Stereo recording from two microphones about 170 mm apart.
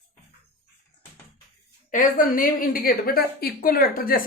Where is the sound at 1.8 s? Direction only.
55° left (ahead or behind).